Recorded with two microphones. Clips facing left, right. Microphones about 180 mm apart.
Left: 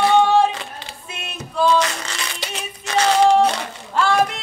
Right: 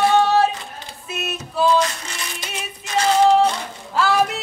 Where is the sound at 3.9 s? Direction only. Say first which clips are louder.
Left 1 dB; 5° right (ahead or behind).